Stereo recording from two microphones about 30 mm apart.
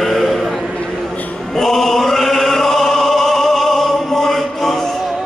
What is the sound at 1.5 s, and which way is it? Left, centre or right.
Music, centre.